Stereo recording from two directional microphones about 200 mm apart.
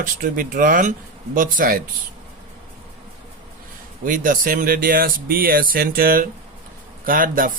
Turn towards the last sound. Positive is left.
turn(degrees=-45)  # may be behind; listen again after turning